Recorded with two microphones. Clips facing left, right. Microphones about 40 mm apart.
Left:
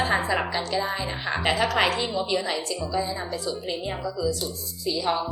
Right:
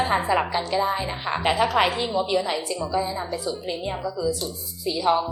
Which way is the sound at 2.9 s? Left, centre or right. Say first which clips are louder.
Right 2 dB; centre.